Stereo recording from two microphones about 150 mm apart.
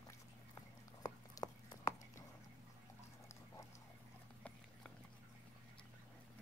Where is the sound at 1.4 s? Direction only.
20° left (ahead or behind).